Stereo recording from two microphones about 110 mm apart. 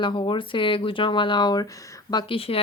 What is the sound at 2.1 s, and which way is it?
Speech, 55° left (ahead or behind).